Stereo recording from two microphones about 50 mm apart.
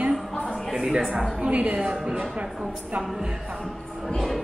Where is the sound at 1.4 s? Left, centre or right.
Right.